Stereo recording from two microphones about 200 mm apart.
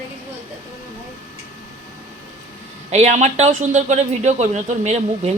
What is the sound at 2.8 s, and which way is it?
A man's voice, 35° right (ahead or behind).